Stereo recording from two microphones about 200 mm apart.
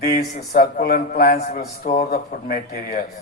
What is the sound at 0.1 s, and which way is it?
A man's voice, 50° left (ahead or behind).